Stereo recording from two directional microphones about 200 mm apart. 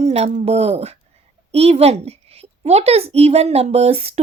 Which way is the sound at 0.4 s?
30° right (ahead or behind).